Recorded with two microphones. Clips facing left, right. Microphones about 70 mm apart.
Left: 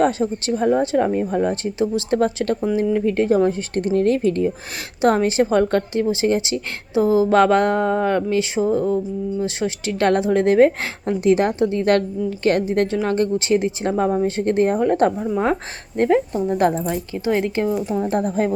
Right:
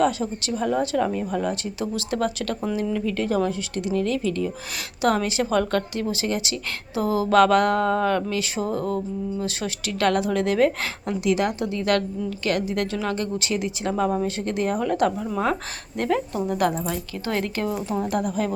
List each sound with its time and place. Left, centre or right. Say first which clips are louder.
0.0 s a woman's voice: left 4 dB; left
3.8 s a woman's voice: left 6 dB; left
16.9 s a woman's voice: left 6 dB; centre
18.0 s a woman's voice: left 4 dB; left